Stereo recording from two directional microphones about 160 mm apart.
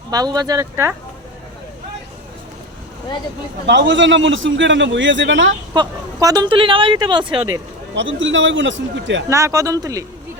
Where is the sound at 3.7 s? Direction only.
90° right.